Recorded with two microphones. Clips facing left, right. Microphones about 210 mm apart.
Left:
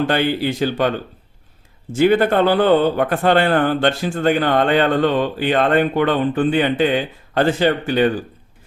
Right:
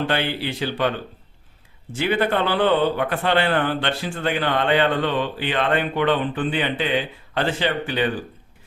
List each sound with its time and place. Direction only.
0.1 s a man's voice: 45° left (ahead or behind)
1.9 s a man's voice: 45° left (ahead or behind)